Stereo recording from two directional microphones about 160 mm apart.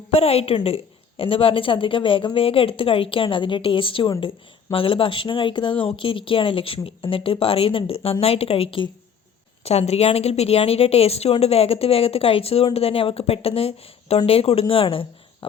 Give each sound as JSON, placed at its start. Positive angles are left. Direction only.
{"t": 0.1, "sound": "a woman's voice", "side_deg": 40}